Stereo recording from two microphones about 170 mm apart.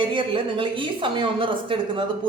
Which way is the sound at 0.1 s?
30° right (ahead or behind).